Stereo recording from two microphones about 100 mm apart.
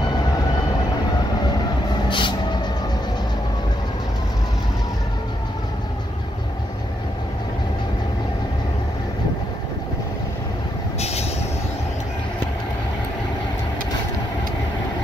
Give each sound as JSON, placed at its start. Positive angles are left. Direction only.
{"t": 2.0, "sound": "vehicle", "side_deg": 55}